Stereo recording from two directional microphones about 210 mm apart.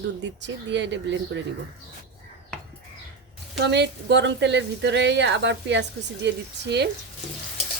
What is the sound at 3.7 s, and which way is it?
A woman's voice, 55° right (ahead or behind).